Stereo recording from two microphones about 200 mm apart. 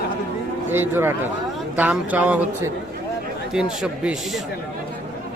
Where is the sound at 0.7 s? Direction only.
10° right (ahead or behind).